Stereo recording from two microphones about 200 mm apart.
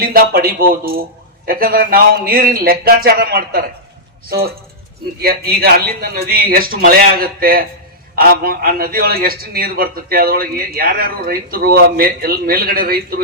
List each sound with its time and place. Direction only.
0.0 s a man's voice: 50° right (ahead or behind)